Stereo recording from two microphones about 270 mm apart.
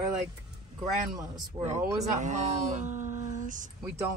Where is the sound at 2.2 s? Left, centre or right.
Right.